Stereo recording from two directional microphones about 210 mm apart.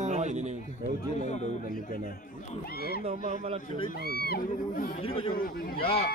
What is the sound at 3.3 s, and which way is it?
Speech, 30° right (ahead or behind).